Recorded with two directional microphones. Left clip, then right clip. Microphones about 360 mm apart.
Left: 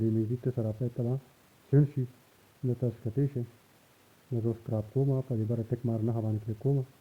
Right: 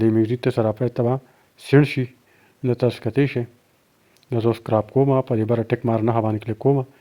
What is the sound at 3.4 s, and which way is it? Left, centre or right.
Speech, right.